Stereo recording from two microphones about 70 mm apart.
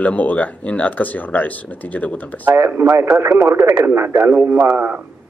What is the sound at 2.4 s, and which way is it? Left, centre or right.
A man's voice, right.